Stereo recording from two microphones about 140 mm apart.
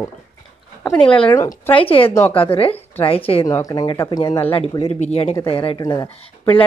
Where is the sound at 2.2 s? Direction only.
40° left (ahead or behind).